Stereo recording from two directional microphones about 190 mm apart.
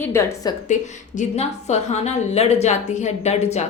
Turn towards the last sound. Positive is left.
turn(degrees=35)  # may be behind; listen again after turning